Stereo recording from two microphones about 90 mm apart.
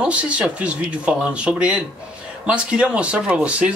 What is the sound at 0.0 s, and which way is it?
Speech, 15° right (ahead or behind).